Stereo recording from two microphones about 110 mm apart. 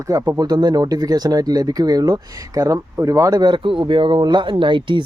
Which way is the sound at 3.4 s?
50° right (ahead or behind).